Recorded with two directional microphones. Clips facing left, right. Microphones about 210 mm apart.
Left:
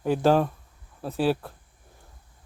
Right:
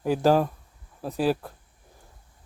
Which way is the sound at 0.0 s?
5° right (ahead or behind).